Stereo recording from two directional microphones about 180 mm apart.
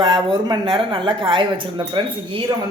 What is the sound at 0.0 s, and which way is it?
Speech, 25° right (ahead or behind).